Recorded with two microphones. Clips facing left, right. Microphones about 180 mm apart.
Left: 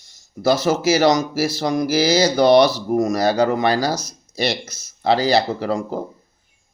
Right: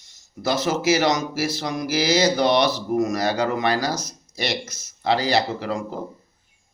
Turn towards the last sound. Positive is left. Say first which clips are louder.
# left 4 dB
turn(degrees=35)  # may be behind; listen again after turning